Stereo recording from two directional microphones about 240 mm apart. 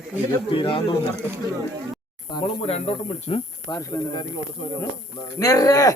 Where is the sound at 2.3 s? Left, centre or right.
Left.